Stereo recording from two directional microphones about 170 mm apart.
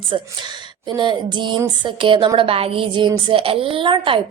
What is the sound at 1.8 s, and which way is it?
Speech, 30° right (ahead or behind).